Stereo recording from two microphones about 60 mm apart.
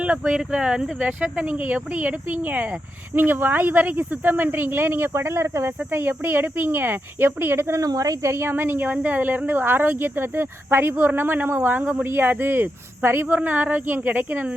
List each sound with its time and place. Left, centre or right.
0.3 s speech: centre; by 5.7 s right
5.9 s speech: right
7.8 s speech: right
8.2 s speech: right
13.3 s speech: right